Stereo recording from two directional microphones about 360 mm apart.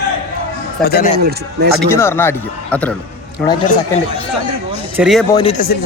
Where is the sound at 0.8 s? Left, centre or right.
Left.